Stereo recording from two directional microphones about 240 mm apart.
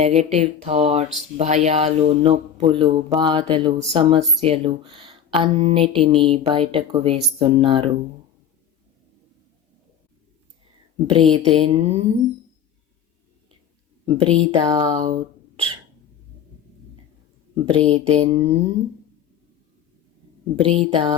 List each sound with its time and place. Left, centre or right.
0.0 s speech: right
10.9 s speech: right
14.0 s speech: right
17.5 s speech: right
20.6 s speech: right